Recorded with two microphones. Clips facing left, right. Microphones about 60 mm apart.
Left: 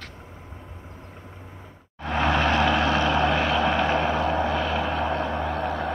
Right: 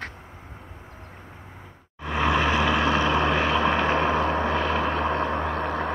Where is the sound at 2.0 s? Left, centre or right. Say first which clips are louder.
Even; centre.